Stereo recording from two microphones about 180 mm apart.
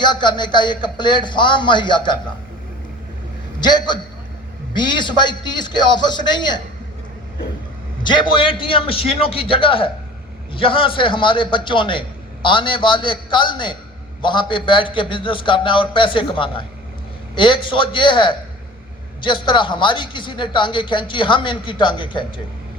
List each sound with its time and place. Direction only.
0.0 s a man's voice: 25° left (ahead or behind)
3.6 s a man's voice: 25° left (ahead or behind)
8.0 s a man's voice: 25° left (ahead or behind)